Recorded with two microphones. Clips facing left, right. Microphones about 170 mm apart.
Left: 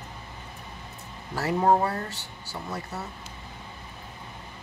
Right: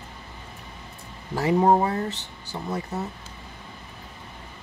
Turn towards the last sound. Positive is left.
turn(degrees=-20)  # may be behind; listen again after turning